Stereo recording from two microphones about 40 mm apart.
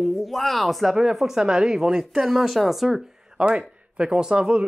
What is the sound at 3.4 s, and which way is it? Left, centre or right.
Speech, right.